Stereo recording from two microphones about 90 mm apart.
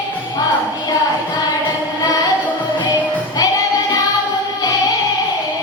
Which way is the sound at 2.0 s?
50° left (ahead or behind).